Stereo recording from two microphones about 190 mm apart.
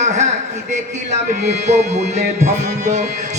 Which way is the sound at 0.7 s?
40° right (ahead or behind).